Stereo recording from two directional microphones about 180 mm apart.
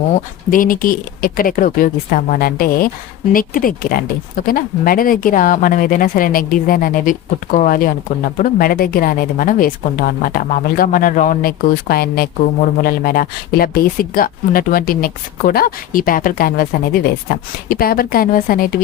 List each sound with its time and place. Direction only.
0.5 s speech: 50° left (ahead or behind)